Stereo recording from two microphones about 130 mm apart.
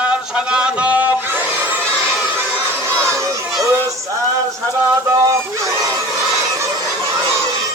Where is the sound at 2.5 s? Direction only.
20° right (ahead or behind).